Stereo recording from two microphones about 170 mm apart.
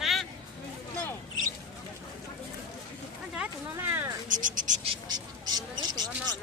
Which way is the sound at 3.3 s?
10° right (ahead or behind).